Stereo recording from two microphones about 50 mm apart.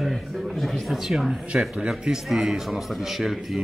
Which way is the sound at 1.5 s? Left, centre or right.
Centre.